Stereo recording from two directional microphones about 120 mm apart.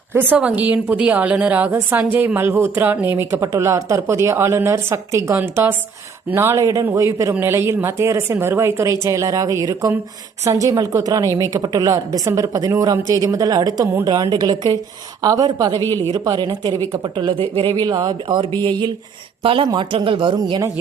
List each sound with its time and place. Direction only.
0.3 s a woman's voice: 10° right (ahead or behind); by 15.8 s 35° right (ahead or behind)
15.8 s speech: 20° left (ahead or behind)
16.1 s speech: 35° right (ahead or behind)